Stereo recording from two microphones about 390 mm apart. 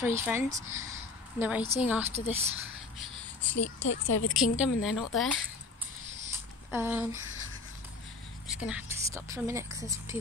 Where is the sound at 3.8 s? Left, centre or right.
Left.